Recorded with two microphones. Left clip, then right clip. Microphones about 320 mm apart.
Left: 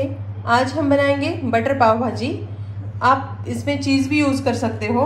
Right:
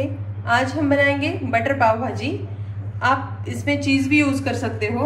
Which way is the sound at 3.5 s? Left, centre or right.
Centre.